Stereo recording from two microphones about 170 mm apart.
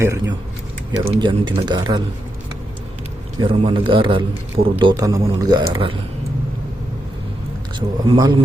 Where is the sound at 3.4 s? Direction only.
30° right (ahead or behind).